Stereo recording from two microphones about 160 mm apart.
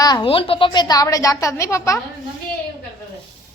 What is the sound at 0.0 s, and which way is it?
A woman's voice, 30° left (ahead or behind).